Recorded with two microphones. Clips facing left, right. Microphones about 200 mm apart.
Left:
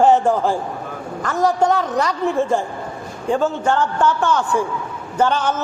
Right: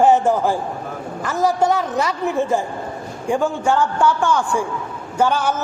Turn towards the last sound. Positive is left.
turn(degrees=-10)  # may be behind; listen again after turning